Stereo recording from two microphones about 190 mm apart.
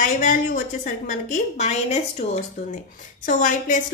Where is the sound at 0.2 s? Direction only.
45° left (ahead or behind).